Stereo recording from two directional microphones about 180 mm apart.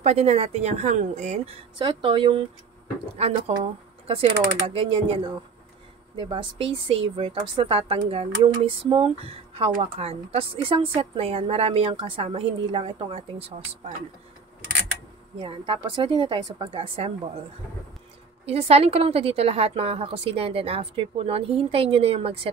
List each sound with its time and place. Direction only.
0.0 s a woman's voice: 35° right (ahead or behind)
15.3 s a woman's voice: 30° right (ahead or behind)
18.4 s speech: 35° right (ahead or behind)